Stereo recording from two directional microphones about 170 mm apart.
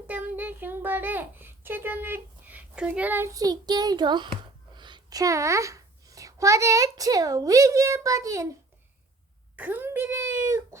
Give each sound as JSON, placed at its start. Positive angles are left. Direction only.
{"t": 0.1, "sound": "a child's voice", "side_deg": -10}
{"t": 9.6, "sound": "speech", "side_deg": -10}